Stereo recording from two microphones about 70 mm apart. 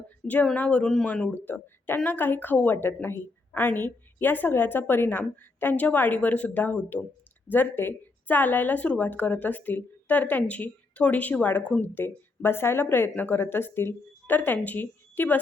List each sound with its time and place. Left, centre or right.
0.5 s speech: left